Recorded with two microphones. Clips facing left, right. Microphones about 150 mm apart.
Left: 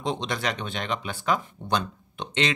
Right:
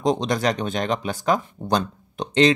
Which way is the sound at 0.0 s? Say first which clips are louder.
Right 7 dB; 40° right (ahead or behind).